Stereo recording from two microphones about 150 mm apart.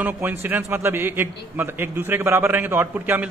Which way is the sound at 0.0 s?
15° right (ahead or behind).